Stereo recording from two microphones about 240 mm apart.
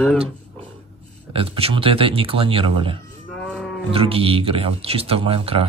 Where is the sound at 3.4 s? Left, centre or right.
Centre.